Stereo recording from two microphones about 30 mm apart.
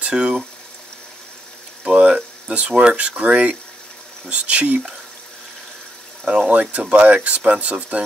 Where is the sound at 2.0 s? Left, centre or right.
Right.